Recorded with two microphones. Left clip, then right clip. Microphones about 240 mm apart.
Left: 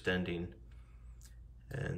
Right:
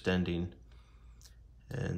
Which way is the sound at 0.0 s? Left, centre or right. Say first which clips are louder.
Right 2 dB; centre.